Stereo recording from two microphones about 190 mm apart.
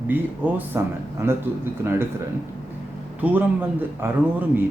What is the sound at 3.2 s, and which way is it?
Speech, 10° right (ahead or behind).